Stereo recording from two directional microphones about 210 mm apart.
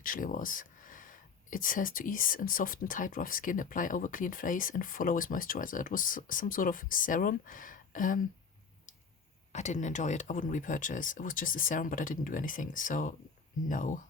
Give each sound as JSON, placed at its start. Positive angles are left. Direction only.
{"t": 0.0, "sound": "speech", "side_deg": 40}
{"t": 9.5, "sound": "speech", "side_deg": 35}